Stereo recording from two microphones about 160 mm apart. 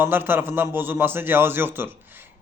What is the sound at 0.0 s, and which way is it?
A man's voice, 15° right (ahead or behind).